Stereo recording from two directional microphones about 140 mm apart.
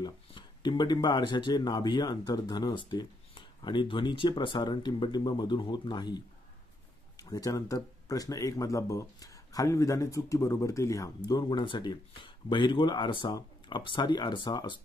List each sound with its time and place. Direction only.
0.0 s speech: 35° left (ahead or behind)